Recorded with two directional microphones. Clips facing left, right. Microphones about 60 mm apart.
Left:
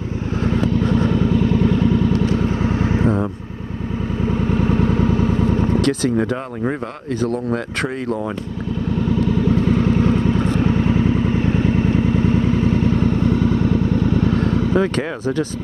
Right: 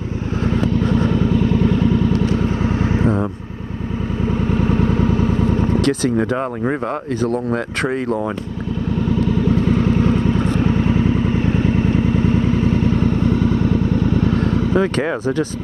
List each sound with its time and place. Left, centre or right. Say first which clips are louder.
0.6 s vehicle: even; right
2.6 s vehicle: even; right
4.6 s vehicle: even; right
5.8 s speech: right 1 dB; centre
6.3 s speech: right 3 dB; right
7.2 s speech: left 1 dB; centre
9.8 s vehicle: even; right
14.2 s vehicle: even; right